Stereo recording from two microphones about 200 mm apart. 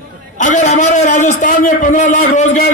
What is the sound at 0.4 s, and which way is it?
A man's voice, 40° left (ahead or behind).